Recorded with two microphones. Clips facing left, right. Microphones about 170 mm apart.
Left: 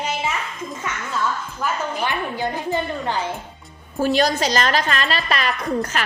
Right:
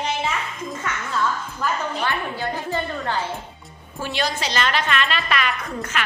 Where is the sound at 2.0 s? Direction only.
15° left (ahead or behind).